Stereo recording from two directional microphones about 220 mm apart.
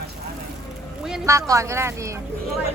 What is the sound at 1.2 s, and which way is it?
Speech, 15° right (ahead or behind).